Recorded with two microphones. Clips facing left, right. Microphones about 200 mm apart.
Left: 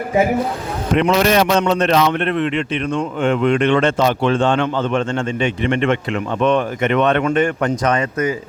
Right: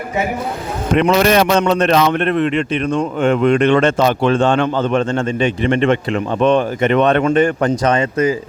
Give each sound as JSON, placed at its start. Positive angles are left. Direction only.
{"t": 0.9, "sound": "a man's voice", "side_deg": -55}